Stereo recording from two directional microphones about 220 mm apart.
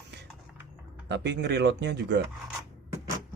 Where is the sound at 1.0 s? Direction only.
50° right (ahead or behind).